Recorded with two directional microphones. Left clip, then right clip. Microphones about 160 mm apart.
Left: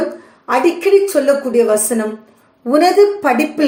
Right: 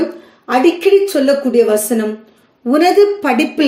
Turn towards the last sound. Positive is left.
turn(degrees=-20)  # may be behind; listen again after turning